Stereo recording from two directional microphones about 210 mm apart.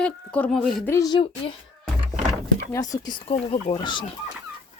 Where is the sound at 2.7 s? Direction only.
15° left (ahead or behind).